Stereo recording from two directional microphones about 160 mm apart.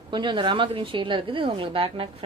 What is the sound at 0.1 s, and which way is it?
A woman's voice, 30° right (ahead or behind).